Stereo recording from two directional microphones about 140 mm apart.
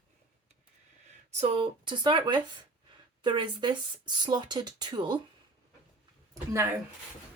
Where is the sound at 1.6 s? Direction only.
35° right (ahead or behind).